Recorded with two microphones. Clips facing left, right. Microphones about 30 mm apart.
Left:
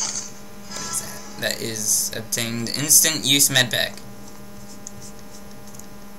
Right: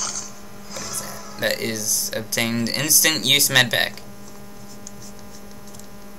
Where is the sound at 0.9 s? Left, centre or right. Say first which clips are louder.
Even; centre.